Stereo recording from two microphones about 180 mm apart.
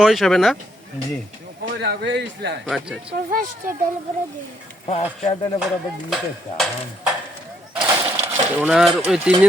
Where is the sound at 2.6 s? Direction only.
5° right (ahead or behind).